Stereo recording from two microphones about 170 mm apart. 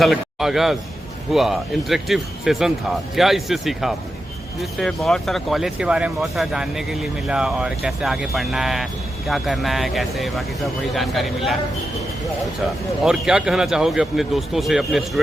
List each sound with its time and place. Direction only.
0.0 s a man's voice: centre (ahead or behind)
13.1 s speech: 5° right (ahead or behind)